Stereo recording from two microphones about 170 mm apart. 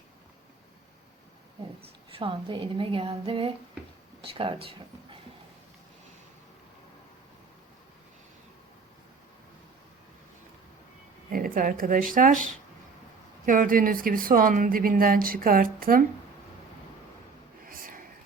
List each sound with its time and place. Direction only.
1.8 s a woman's voice: 30° right (ahead or behind)
11.3 s speech: 55° right (ahead or behind)
13.4 s speech: 50° right (ahead or behind)
17.7 s whispering: 55° right (ahead or behind)